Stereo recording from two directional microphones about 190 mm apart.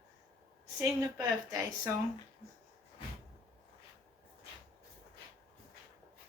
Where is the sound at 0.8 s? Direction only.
15° right (ahead or behind).